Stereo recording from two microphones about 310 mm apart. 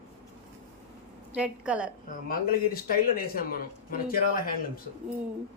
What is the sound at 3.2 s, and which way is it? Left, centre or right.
Speech, left.